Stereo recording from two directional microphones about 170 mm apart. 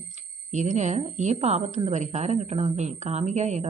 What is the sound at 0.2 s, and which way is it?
A woman's voice, 45° right (ahead or behind).